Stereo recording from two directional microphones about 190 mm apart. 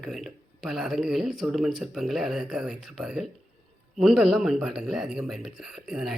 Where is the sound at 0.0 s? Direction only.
Centre (ahead or behind).